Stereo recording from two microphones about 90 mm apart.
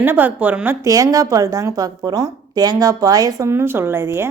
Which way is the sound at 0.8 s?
40° right (ahead or behind).